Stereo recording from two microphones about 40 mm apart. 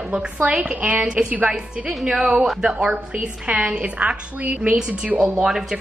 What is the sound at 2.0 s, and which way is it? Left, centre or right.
Speech, centre.